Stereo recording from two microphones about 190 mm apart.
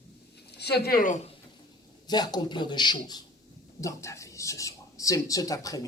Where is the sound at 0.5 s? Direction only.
60° left (ahead or behind).